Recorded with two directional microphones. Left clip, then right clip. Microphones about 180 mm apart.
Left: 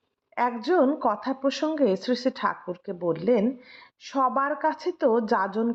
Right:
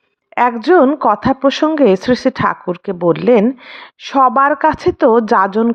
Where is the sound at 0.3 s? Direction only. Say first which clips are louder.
Right 12 dB; 40° right (ahead or behind).